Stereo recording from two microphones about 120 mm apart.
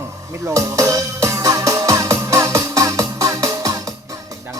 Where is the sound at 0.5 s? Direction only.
25° right (ahead or behind).